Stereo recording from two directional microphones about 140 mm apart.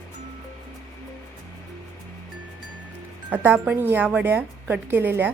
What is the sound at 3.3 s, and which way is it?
Speech, 10° right (ahead or behind).